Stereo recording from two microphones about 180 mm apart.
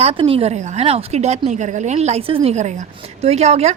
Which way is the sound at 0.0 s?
30° right (ahead or behind).